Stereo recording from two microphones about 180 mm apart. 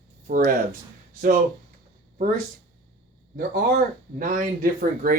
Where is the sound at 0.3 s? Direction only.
50° right (ahead or behind).